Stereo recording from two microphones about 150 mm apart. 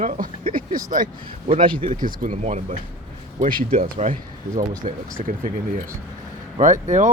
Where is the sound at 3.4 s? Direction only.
70° right (ahead or behind).